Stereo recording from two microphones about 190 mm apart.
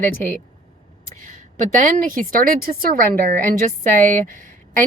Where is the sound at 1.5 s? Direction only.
40° right (ahead or behind).